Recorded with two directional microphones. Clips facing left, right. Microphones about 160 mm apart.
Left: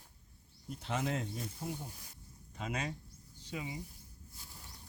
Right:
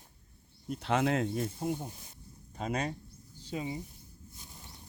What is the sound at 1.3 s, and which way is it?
Speech, 50° right (ahead or behind).